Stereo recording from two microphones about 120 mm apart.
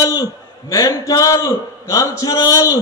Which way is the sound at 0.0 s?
30° left (ahead or behind).